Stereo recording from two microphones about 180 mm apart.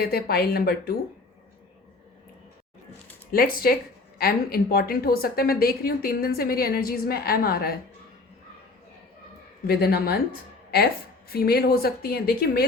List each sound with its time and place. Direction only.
0.1 s a woman's voice: 60° left (ahead or behind)
3.3 s a woman's voice: 55° left (ahead or behind)
9.6 s a woman's voice: 60° left (ahead or behind)
11.3 s a woman's voice: 60° left (ahead or behind)